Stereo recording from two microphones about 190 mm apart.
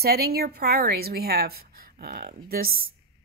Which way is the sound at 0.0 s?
55° right (ahead or behind).